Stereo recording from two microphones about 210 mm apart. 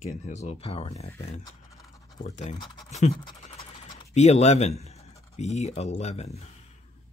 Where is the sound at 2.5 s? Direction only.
20° left (ahead or behind).